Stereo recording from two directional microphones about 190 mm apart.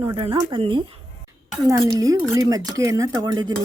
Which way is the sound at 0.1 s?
25° right (ahead or behind).